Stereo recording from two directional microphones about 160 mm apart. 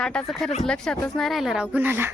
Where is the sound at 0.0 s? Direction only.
5° left (ahead or behind).